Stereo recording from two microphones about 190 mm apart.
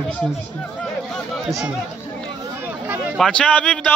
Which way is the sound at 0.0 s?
5° left (ahead or behind).